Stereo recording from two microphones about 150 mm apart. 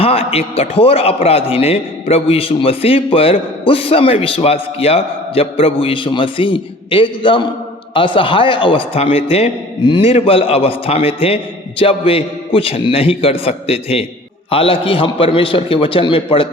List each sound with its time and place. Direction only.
0.0 s a man's voice: 40° left (ahead or behind)